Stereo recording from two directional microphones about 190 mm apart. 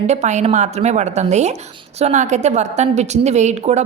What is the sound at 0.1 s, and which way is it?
A woman's voice, 35° right (ahead or behind).